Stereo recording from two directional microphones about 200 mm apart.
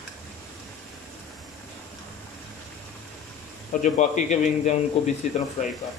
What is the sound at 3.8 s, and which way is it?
Speech, 40° left (ahead or behind).